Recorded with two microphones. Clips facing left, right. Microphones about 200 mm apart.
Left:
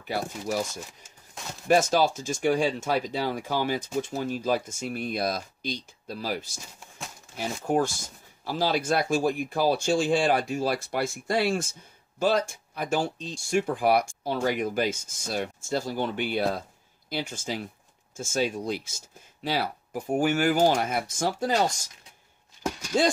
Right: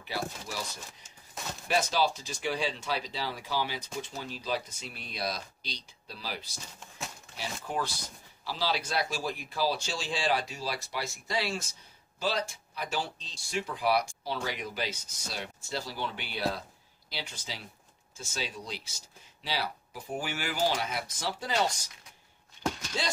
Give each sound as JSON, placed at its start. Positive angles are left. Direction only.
{"t": 0.0, "sound": "speech", "side_deg": 50}
{"t": 1.7, "sound": "speech", "side_deg": 45}